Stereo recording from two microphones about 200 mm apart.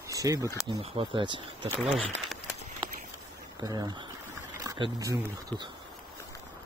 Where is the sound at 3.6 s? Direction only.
20° right (ahead or behind).